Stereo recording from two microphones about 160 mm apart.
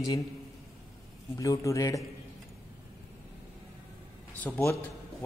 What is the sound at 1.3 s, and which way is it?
Speech, 20° left (ahead or behind).